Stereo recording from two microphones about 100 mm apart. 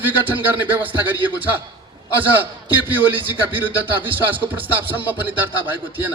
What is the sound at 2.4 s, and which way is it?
Music, 20° right (ahead or behind).